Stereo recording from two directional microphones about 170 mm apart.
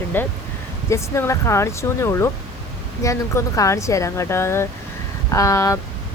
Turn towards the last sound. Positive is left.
turn(degrees=20)  # may be behind; listen again after turning